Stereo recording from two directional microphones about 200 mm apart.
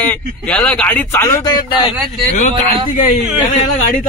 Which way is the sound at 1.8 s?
35° left (ahead or behind).